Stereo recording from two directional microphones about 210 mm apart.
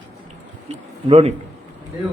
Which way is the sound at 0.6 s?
30° right (ahead or behind).